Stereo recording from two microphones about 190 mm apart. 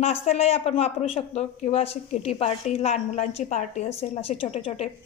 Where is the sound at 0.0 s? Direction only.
35° left (ahead or behind).